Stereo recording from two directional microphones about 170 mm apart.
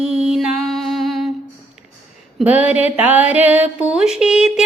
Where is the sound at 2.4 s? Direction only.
10° right (ahead or behind).